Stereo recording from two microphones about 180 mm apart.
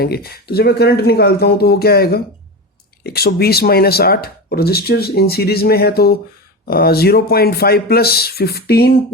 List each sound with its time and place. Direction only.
0.0 s speech: 60° left (ahead or behind)